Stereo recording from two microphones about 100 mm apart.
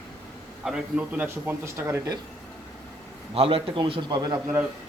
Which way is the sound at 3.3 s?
65° right (ahead or behind).